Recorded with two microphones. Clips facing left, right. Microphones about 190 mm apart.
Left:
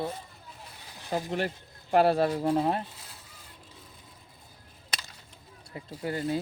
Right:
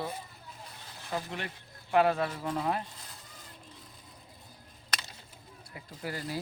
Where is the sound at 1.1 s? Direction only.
40° left (ahead or behind).